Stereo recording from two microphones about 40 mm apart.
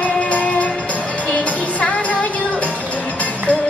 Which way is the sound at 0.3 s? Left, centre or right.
Left.